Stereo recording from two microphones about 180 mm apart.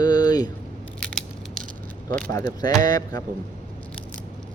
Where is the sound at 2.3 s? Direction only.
20° left (ahead or behind).